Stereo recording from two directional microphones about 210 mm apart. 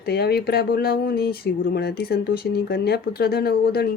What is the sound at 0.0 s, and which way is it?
Speech, 50° left (ahead or behind).